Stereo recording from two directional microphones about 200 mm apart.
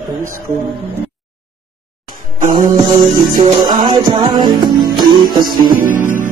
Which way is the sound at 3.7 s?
20° right (ahead or behind).